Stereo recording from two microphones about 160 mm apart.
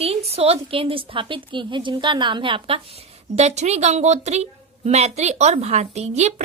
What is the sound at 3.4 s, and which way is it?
A woman's voice, 45° right (ahead or behind).